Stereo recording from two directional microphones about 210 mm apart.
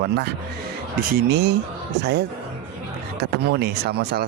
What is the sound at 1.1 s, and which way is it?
Speech, 55° right (ahead or behind).